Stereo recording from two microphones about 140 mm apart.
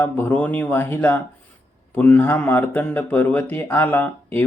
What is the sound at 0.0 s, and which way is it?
Speech, 15° left (ahead or behind).